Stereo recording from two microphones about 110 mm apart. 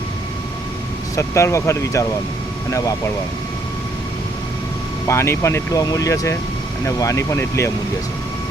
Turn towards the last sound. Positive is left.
turn(degrees=25)  # may be behind; listen again after turning